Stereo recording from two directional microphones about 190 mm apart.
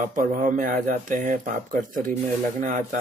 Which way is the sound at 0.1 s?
45° right (ahead or behind).